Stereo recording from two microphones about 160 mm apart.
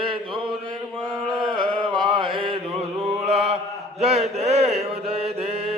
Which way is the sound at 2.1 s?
35° right (ahead or behind).